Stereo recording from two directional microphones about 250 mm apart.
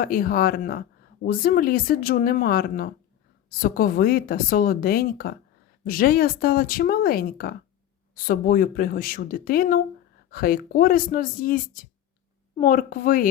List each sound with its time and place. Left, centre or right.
0.0 s speech: left